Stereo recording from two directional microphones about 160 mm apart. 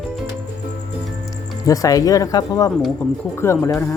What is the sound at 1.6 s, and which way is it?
Speech, 20° left (ahead or behind).